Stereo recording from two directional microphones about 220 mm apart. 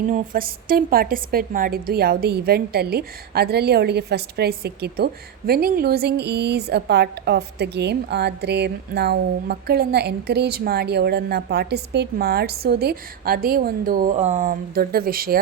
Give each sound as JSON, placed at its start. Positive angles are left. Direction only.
{"t": 0.1, "sound": "a woman's voice", "side_deg": -40}